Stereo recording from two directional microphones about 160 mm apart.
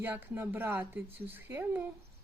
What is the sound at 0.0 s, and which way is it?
Speech, 10° right (ahead or behind).